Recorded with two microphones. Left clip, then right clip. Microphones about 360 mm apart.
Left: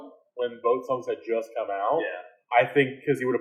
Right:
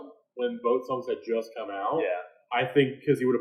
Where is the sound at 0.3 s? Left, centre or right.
Centre.